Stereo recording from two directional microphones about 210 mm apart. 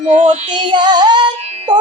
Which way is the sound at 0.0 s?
25° right (ahead or behind).